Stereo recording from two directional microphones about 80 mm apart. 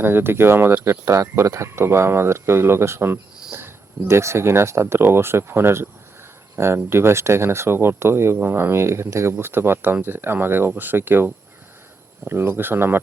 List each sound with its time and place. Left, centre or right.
0.0 s speech: right
12.3 s speech: right